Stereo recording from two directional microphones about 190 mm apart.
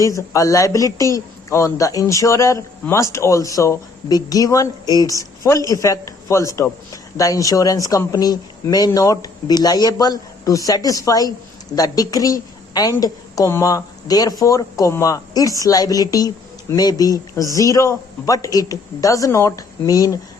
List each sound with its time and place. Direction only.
0.0 s a man's voice: 15° left (ahead or behind)